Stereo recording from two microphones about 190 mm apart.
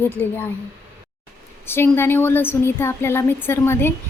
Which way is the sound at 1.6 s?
10° left (ahead or behind).